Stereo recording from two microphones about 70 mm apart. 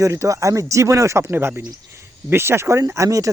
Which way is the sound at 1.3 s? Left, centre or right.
Right.